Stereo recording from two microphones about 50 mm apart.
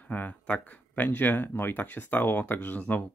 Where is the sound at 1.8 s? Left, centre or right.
Left.